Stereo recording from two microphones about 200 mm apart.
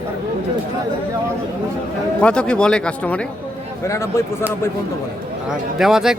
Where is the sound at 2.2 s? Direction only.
5° left (ahead or behind).